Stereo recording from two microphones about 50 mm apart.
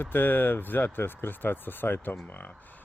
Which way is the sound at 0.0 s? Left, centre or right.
Left.